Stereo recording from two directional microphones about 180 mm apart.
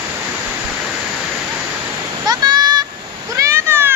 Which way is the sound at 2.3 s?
20° right (ahead or behind).